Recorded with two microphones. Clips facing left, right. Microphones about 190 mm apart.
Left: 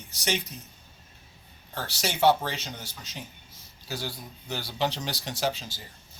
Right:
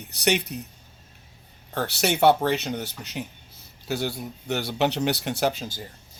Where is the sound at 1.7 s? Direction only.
65° right (ahead or behind).